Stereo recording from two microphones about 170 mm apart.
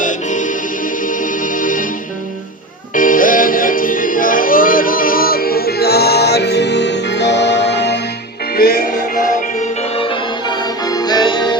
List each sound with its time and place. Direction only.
0.0 s music: 50° left (ahead or behind)
2.9 s music: 50° left (ahead or behind); by 7.9 s 90° left
9.6 s music: 35° left (ahead or behind)